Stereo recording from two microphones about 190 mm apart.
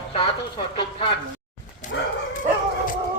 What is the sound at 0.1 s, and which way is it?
Speech, 25° left (ahead or behind).